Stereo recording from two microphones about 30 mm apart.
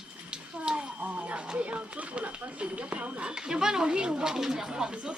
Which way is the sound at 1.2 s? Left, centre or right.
Right.